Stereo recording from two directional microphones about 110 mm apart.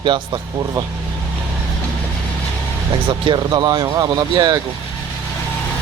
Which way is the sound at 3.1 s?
45° right (ahead or behind).